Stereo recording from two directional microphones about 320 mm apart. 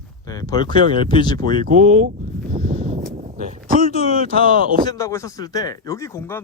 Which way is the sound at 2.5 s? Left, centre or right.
Right.